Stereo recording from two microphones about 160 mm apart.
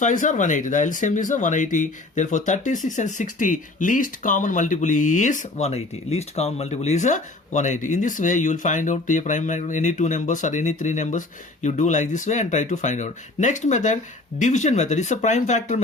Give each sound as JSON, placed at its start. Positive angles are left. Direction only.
{"t": 0.0, "sound": "speech", "side_deg": 55}